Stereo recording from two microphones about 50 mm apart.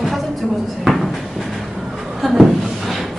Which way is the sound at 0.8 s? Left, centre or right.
Centre.